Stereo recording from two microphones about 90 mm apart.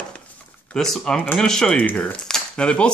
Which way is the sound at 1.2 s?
15° left (ahead or behind).